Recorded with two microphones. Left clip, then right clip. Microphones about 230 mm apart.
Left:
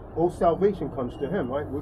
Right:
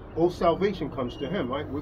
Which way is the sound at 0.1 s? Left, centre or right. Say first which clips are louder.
Left 1 dB; right.